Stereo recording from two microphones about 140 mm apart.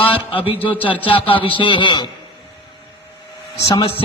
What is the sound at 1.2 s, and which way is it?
Speech, 40° left (ahead or behind).